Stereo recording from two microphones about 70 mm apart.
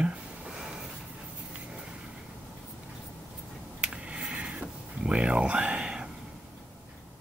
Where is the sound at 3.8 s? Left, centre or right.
Centre.